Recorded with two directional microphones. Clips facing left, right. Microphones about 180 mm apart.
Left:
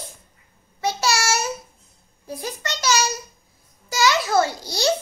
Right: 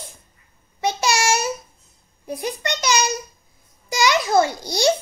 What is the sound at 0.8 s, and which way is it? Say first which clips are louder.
Babbling: right 2 dB; 15° right (ahead or behind).